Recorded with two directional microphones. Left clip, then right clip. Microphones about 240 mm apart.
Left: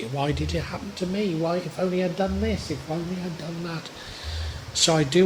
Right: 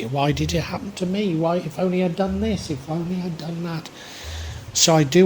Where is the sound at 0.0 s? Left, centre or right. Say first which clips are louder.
Right 5 dB; right.